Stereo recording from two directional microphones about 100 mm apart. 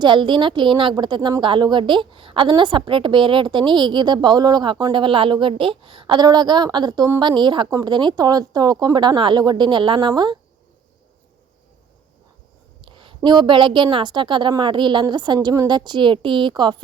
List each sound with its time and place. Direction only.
0.0 s a woman's voice: 55° right (ahead or behind)
7.7 s a woman's voice: 35° right (ahead or behind)
12.8 s a woman's voice: 60° right (ahead or behind)